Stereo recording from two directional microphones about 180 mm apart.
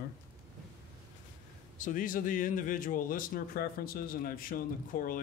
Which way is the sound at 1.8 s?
50° left (ahead or behind).